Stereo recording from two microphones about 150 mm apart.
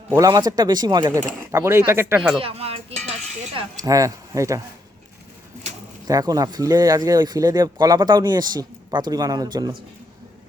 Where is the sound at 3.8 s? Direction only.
20° right (ahead or behind).